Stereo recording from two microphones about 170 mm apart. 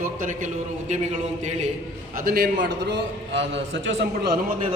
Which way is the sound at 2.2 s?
60° right (ahead or behind).